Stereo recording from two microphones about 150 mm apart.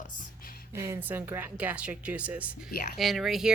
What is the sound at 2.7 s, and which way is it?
Speech, 90° left.